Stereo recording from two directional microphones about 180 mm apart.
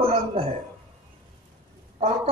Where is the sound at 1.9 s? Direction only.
35° right (ahead or behind).